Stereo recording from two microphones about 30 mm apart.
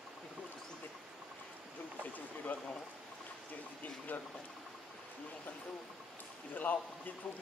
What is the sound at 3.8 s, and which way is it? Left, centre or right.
Speech, left.